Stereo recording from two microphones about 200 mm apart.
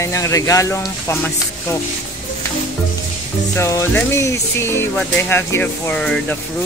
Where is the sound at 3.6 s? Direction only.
15° left (ahead or behind).